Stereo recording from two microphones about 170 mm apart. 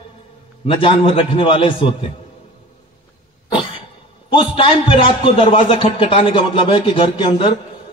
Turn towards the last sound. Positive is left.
turn(degrees=30)  # may be behind; listen again after turning